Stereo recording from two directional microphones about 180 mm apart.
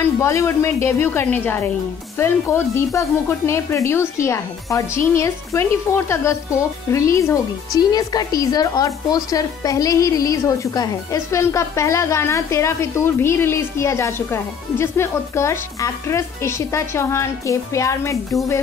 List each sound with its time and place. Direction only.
0.0 s speech: 15° left (ahead or behind)